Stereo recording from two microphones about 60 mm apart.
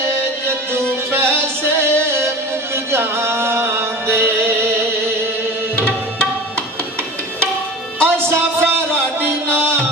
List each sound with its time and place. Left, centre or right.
0.7 s music: right
5.7 s music: centre
8.0 s music: right